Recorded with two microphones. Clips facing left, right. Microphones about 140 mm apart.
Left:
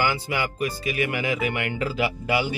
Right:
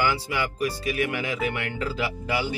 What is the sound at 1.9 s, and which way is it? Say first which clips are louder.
Speech: left 5 dB; 65° left (ahead or behind).